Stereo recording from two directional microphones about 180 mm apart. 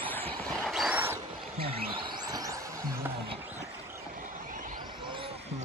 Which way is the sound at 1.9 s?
20° right (ahead or behind).